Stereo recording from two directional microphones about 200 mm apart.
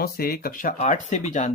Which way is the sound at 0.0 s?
50° left (ahead or behind).